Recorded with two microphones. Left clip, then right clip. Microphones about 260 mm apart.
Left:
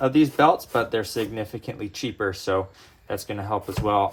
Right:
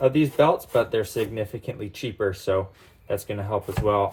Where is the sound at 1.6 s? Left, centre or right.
Left.